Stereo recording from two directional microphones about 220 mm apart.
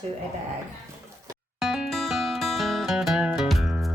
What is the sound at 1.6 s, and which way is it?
Music, centre (ahead or behind).